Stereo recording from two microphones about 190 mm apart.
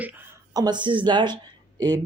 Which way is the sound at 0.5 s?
20° right (ahead or behind).